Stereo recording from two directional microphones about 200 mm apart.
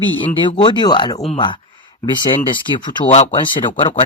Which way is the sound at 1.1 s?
30° left (ahead or behind).